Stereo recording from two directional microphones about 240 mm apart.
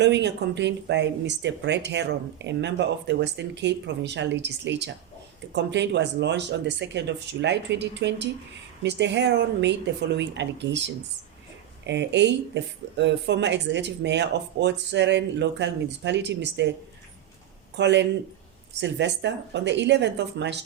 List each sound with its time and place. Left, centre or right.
0.0 s speech: right
17.7 s speech: right